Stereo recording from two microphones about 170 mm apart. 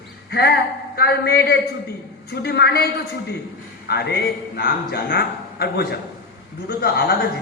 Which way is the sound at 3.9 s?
70° left (ahead or behind).